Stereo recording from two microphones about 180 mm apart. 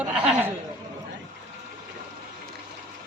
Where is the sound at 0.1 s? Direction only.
5° right (ahead or behind).